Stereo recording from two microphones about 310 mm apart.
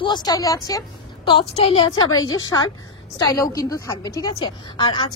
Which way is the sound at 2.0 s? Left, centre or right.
Left.